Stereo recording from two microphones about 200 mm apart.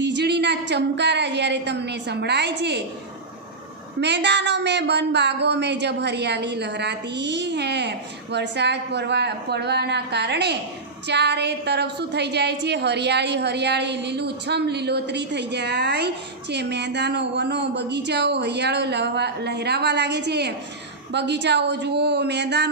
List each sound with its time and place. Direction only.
0.0 s a woman's voice: 60° right (ahead or behind)
4.0 s a woman's voice: 60° right (ahead or behind)